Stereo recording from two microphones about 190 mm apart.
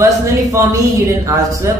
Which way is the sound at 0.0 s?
15° right (ahead or behind).